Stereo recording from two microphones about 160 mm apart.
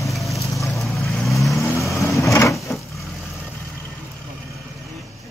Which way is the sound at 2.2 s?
20° left (ahead or behind).